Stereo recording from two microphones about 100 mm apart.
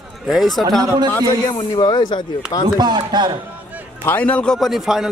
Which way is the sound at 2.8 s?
45° right (ahead or behind).